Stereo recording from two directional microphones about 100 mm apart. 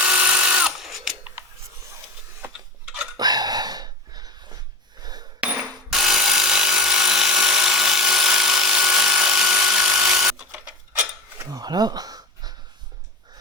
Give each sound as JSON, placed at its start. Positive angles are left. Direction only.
{"t": 0.0, "sound": "drill", "side_deg": -10}
{"t": 3.2, "sound": "a sound", "side_deg": -40}
{"t": 5.4, "sound": "mechanisms", "side_deg": -10}
{"t": 5.9, "sound": "tools", "side_deg": -5}
{"t": 10.5, "sound": "rub", "side_deg": -10}
{"t": 11.5, "sound": "a sound", "side_deg": -45}